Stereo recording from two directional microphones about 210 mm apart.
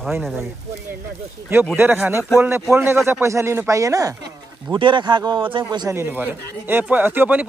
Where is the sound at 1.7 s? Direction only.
10° right (ahead or behind).